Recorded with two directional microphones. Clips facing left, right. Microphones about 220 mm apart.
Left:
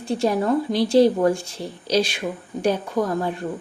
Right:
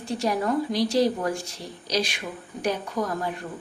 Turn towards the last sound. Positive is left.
turn(degrees=30)  # may be behind; listen again after turning